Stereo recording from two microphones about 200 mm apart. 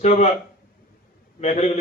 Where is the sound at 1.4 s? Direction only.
35° left (ahead or behind).